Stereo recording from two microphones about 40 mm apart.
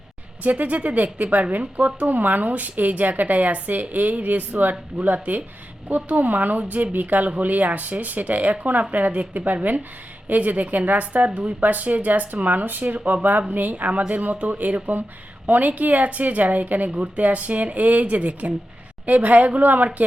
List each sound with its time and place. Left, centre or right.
0.6 s a woman's voice: right